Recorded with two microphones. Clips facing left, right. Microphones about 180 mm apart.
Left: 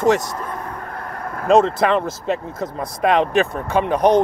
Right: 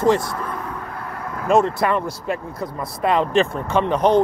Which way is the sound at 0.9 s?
50° left (ahead or behind).